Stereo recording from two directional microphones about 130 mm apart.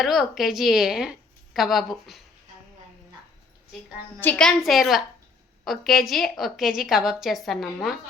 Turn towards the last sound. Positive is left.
turn(degrees=0)  # may be behind; listen again after turning